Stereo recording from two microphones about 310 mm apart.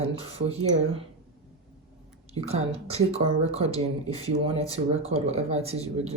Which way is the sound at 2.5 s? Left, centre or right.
Centre.